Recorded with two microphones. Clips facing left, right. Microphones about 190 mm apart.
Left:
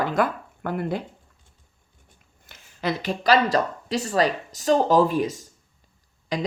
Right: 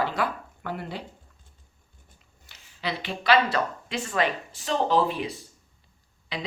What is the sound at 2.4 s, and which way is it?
Speech, 50° left (ahead or behind).